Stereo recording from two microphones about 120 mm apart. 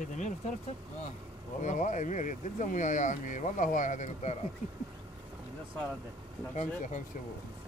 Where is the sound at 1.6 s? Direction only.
90° left.